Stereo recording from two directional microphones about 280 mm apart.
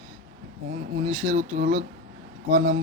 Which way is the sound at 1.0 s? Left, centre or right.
Right.